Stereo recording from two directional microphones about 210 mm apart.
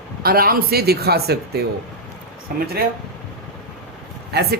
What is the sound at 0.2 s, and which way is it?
Speech, 45° right (ahead or behind).